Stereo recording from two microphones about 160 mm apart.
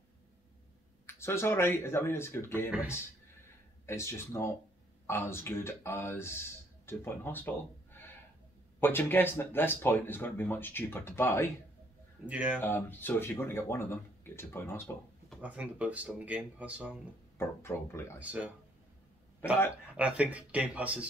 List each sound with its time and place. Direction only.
1.0 s speech: 15° left (ahead or behind)
3.8 s speech: 15° left (ahead or behind)
12.3 s speech: 10° right (ahead or behind)
12.6 s speech: 15° left (ahead or behind)
15.4 s speech: 10° right (ahead or behind)
17.4 s speech: 15° left (ahead or behind)
18.2 s speech: 10° right (ahead or behind)
19.4 s speech: 15° left (ahead or behind)
20.0 s speech: 10° right (ahead or behind)